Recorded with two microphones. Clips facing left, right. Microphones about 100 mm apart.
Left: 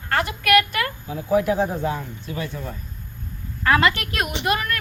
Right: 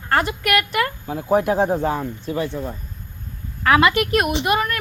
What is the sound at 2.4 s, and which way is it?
Speech, 25° right (ahead or behind).